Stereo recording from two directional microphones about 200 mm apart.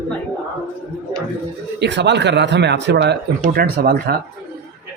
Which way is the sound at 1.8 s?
60° right (ahead or behind).